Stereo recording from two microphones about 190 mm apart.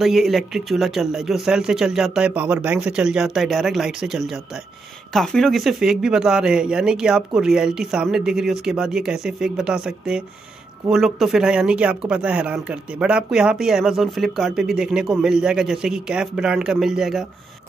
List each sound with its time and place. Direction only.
0.0 s speech: centre (ahead or behind)